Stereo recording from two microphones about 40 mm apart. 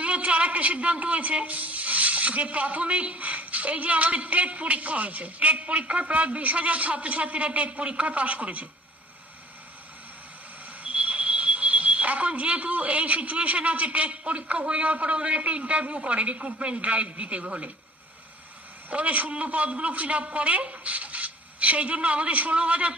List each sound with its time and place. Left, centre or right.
0.0 s speech: right
10.8 s speech: right
18.9 s speech: right